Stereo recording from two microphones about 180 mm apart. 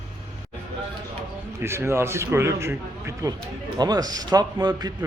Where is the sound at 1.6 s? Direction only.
15° right (ahead or behind).